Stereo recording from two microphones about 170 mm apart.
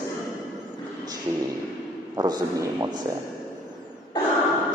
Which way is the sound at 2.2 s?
25° right (ahead or behind).